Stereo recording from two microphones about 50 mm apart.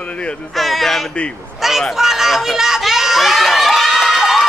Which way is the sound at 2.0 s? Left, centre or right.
Centre.